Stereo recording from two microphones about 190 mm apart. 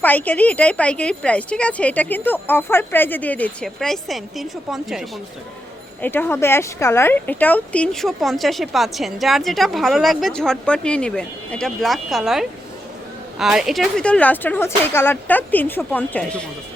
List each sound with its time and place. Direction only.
0.0 s speech: 10° left (ahead or behind)
6.0 s speech: 10° left (ahead or behind)